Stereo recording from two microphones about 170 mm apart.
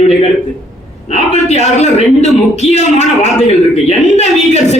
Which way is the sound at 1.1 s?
40° left (ahead or behind).